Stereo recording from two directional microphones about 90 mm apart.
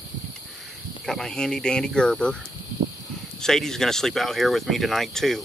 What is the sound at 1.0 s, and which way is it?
Speech, 5° left (ahead or behind).